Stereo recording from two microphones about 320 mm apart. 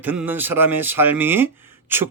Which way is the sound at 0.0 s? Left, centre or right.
Centre.